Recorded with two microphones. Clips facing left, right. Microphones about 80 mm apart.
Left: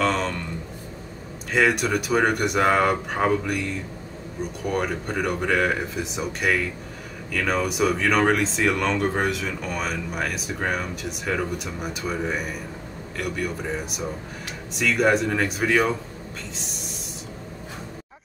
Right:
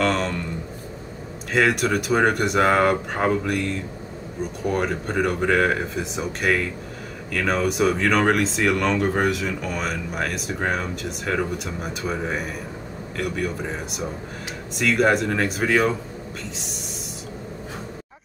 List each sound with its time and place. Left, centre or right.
0.0 s speech: centre
1.5 s speech: centre
4.6 s speech: centre